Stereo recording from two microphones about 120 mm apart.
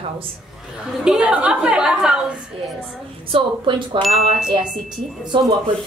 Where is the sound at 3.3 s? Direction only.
45° right (ahead or behind).